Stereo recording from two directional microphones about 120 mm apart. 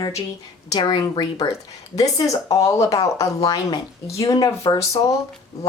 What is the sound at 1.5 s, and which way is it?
A woman's voice, 30° left (ahead or behind).